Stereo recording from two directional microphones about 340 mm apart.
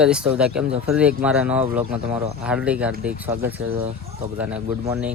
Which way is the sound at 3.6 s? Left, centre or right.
Right.